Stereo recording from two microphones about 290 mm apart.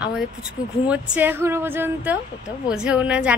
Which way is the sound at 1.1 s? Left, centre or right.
Centre.